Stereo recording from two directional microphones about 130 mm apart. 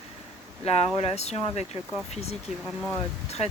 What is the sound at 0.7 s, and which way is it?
Speech, 55° left (ahead or behind).